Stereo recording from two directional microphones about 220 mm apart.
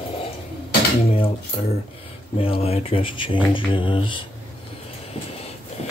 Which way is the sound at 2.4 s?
25° left (ahead or behind).